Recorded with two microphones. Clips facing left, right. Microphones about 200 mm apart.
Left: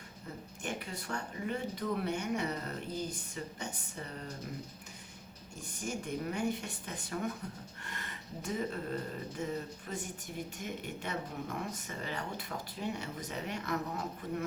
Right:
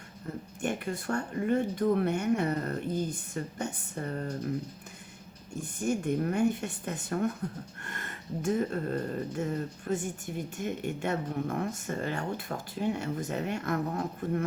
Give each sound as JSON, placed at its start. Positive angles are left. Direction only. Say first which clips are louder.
{"t": 0.6, "sound": "speech", "louder": "right 8 dB", "side_deg": -50}
{"t": 5.8, "sound": "speech", "louder": "right 8 dB", "side_deg": -55}